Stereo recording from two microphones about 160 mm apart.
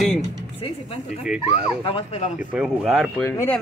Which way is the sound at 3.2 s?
15° left (ahead or behind).